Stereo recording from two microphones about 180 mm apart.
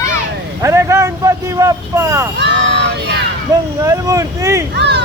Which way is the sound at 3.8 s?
15° right (ahead or behind).